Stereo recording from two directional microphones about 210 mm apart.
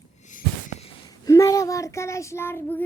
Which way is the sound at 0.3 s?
35° left (ahead or behind).